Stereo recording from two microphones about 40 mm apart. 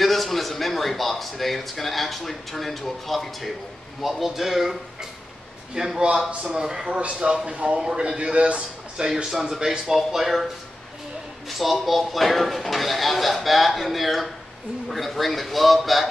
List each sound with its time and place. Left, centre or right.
0.0 s a man's voice: centre
5.8 s speech: centre
7.0 s a man's voice: right
9.1 s a man's voice: centre
11.4 s a man's voice: centre